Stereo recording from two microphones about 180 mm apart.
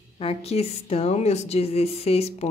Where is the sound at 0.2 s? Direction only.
35° left (ahead or behind).